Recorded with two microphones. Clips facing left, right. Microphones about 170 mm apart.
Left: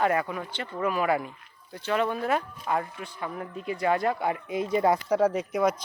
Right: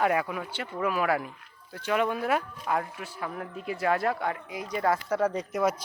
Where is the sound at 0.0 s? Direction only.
5° right (ahead or behind).